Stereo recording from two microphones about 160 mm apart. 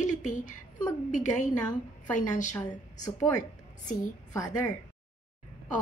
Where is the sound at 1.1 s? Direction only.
50° left (ahead or behind).